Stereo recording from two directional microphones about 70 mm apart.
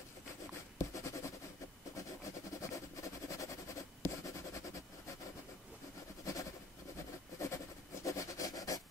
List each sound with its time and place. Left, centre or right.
0.7 s writing: left
2.6 s vehicle: left
4.0 s writing: left
7.3 s a sound: left